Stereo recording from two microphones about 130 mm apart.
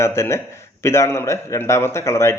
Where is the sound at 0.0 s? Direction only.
20° left (ahead or behind).